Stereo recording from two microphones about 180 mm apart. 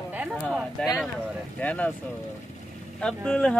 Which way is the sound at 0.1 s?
5° right (ahead or behind).